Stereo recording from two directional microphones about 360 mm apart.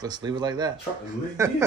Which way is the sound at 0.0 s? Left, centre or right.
Centre.